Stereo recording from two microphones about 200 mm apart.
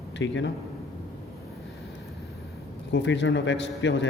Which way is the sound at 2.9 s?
65° left (ahead or behind).